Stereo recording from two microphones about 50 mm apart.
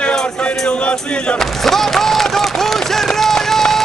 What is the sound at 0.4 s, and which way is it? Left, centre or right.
Music, left.